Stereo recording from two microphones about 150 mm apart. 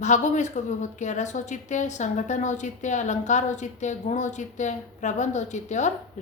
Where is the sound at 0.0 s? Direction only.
55° left (ahead or behind).